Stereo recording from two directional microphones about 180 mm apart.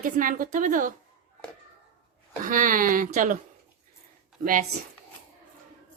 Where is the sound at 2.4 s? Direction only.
50° right (ahead or behind).